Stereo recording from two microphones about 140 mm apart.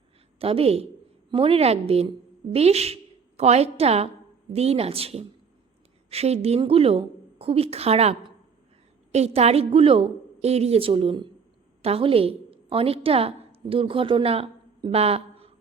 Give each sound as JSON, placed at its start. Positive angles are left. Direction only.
{"t": 0.3, "sound": "a woman's voice", "side_deg": -45}
{"t": 9.1, "sound": "a woman's voice", "side_deg": -50}